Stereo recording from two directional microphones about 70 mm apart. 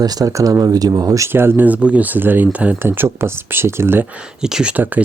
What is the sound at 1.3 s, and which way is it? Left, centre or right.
Speech, right.